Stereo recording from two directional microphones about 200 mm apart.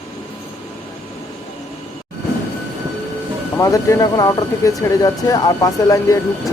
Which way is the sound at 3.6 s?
15° left (ahead or behind).